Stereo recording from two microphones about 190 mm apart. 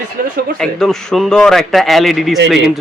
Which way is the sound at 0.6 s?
Centre (ahead or behind).